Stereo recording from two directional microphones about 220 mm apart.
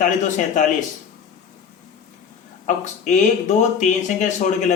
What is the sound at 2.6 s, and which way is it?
Speech, 35° left (ahead or behind).